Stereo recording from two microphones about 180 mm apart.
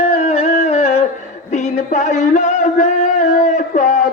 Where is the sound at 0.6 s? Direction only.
35° left (ahead or behind).